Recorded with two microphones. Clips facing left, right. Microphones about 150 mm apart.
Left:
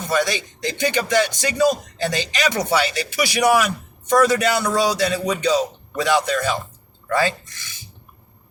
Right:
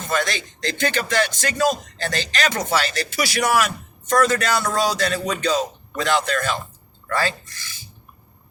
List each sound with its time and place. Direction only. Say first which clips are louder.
0.0 s speech: left 3 dB; 15° left (ahead or behind)